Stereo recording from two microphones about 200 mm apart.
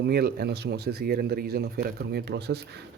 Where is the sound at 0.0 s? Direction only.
55° right (ahead or behind).